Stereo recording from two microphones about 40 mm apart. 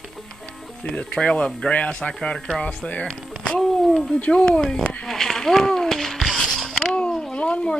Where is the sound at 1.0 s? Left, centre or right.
Left.